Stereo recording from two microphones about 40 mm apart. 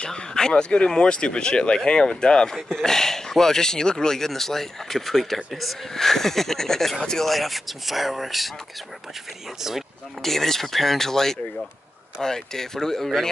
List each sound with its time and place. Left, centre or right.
0.0 s speech: centre
7.2 s speech: centre
9.6 s speech: centre
10.2 s speech: centre